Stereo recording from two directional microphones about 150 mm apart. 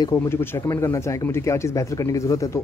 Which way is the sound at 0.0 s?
20° left (ahead or behind).